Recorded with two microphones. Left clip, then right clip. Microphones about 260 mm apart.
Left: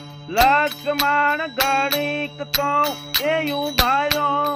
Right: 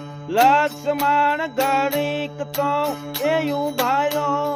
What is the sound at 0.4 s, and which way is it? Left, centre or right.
Music, centre.